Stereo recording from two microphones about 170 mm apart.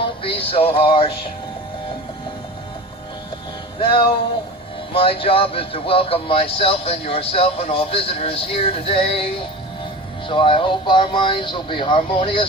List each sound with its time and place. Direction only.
0.0 s music: 30° left (ahead or behind)
3.8 s music: 30° left (ahead or behind)
4.9 s speech: 30° left (ahead or behind)
10.2 s speech: 30° left (ahead or behind)